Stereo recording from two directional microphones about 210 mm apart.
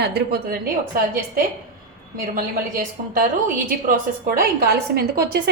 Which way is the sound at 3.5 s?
40° right (ahead or behind).